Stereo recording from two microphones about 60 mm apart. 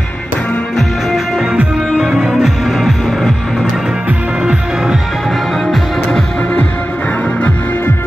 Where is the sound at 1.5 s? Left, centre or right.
Centre.